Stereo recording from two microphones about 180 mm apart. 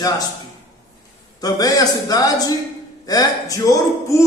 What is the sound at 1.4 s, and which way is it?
A man's voice, 20° left (ahead or behind).